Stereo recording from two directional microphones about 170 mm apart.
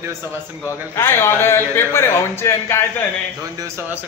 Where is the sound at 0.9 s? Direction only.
15° left (ahead or behind).